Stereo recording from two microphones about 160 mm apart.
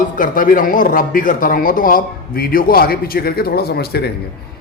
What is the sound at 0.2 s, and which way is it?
Speech, 60° left (ahead or behind).